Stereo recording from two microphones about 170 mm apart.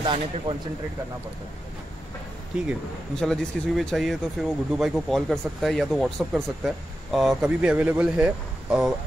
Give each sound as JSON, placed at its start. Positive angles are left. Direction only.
{"t": 0.0, "sound": "speech", "side_deg": -30}
{"t": 3.2, "sound": "speech", "side_deg": 0}